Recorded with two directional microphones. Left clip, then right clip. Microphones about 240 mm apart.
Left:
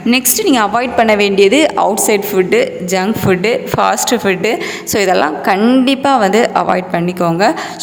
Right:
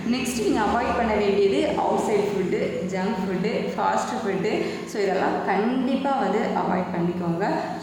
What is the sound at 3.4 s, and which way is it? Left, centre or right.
Speech, left.